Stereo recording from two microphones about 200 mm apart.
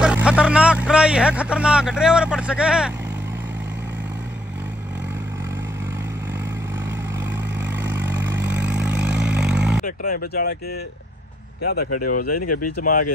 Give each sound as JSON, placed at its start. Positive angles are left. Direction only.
{"t": 0.0, "sound": "speech", "side_deg": -5}
{"t": 7.6, "sound": "vehicle", "side_deg": -10}
{"t": 9.8, "sound": "speech", "side_deg": 45}
{"t": 11.6, "sound": "speech", "side_deg": 50}